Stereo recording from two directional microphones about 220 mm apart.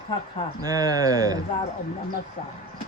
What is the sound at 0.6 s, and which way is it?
Speech, 15° right (ahead or behind).